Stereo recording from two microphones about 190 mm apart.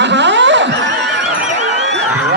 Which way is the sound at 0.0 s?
70° right (ahead or behind).